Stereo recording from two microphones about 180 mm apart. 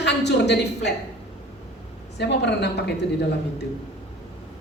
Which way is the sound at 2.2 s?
70° left (ahead or behind).